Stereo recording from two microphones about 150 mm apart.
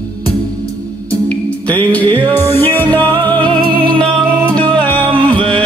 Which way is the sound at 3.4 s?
35° right (ahead or behind).